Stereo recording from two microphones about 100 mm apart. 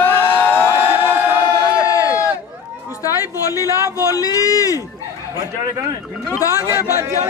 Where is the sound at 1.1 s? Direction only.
15° right (ahead or behind).